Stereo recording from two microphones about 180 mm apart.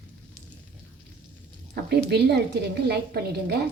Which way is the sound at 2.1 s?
65° right (ahead or behind).